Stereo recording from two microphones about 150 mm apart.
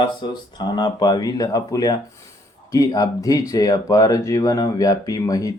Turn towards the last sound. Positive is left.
turn(degrees=25)  # may be behind; listen again after turning